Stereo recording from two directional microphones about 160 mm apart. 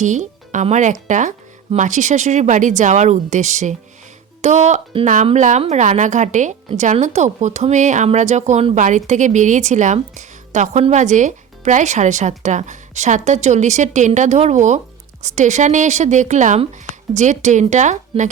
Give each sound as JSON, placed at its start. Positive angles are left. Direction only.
{"t": 0.0, "sound": "speech", "side_deg": -50}
{"t": 18.1, "sound": "a woman's voice", "side_deg": -35}